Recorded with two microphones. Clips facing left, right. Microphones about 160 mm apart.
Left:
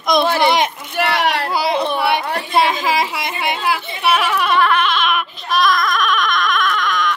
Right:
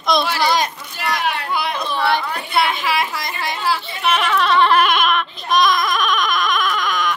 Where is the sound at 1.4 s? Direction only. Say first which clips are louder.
Left 3 dB; 35° left (ahead or behind).